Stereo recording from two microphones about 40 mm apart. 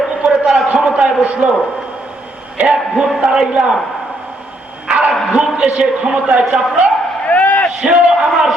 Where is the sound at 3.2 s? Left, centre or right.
Centre.